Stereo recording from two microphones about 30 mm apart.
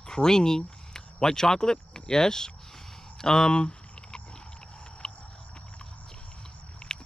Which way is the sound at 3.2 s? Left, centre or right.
Left.